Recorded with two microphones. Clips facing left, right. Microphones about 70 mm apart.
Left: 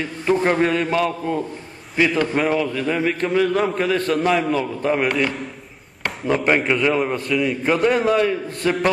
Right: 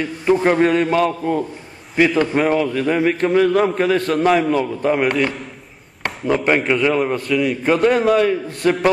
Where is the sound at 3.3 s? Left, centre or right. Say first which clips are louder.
Right 3 dB; right.